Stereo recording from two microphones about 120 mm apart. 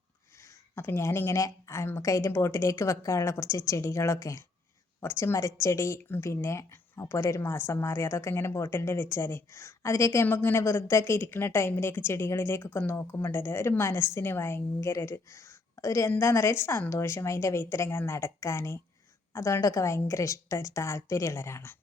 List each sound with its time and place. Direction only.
0.8 s speech: 20° left (ahead or behind)